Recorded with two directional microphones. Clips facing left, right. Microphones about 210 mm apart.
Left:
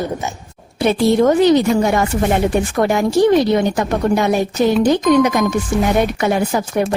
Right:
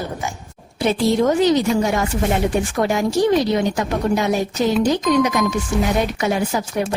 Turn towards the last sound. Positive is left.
turn(degrees=55)  # may be behind; listen again after turning